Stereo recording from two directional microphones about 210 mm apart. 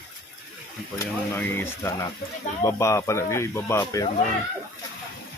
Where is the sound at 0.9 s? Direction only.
10° left (ahead or behind).